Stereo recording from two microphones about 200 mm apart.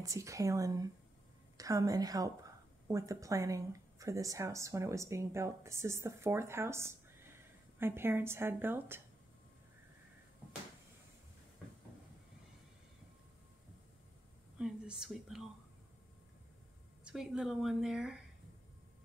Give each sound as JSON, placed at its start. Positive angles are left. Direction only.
{"t": 0.0, "sound": "a woman's voice", "side_deg": -15}
{"t": 14.6, "sound": "speech", "side_deg": -5}
{"t": 17.0, "sound": "a woman's voice", "side_deg": 0}